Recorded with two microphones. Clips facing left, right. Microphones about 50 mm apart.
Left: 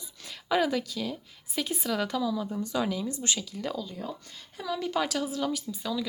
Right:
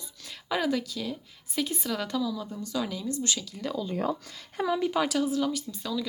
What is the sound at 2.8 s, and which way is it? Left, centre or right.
Speech, centre.